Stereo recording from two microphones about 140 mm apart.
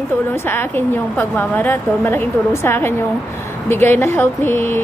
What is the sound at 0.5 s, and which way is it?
Speech, 15° left (ahead or behind).